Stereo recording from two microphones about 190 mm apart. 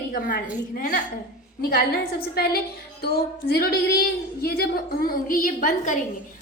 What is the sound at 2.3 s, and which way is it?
A woman's voice, 55° left (ahead or behind).